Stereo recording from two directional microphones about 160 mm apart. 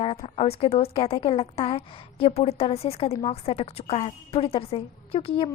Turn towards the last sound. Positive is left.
turn(degrees=35)  # may be behind; listen again after turning